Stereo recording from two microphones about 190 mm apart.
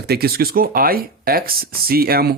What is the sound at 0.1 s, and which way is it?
Speech, 55° right (ahead or behind).